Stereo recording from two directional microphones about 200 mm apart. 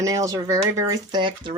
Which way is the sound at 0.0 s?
15° right (ahead or behind).